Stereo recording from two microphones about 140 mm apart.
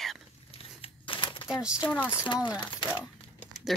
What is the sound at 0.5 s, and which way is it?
Crumpling, 40° left (ahead or behind).